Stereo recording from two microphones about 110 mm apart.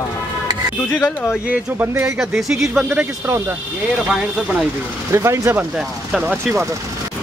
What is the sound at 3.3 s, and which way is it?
Speech, 25° right (ahead or behind).